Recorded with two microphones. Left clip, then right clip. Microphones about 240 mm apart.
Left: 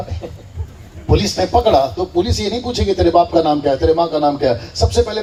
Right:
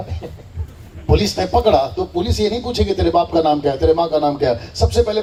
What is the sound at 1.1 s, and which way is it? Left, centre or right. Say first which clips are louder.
A man's voice: left 2 dB; right.